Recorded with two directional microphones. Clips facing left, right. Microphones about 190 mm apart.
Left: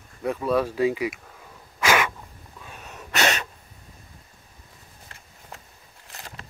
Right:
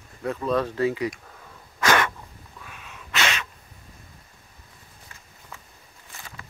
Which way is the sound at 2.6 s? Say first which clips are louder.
Left 4 dB; 40° left (ahead or behind).